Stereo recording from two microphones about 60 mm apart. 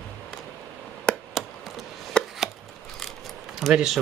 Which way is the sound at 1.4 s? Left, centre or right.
Centre.